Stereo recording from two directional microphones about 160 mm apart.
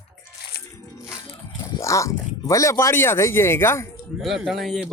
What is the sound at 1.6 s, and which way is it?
Speech, 20° left (ahead or behind).